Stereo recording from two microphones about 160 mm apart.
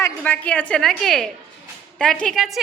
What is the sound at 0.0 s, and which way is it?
A woman's voice, 10° left (ahead or behind).